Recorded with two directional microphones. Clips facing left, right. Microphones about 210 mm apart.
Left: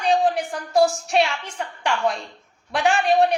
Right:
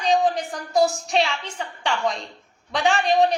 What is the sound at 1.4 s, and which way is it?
A woman's voice, 10° left (ahead or behind).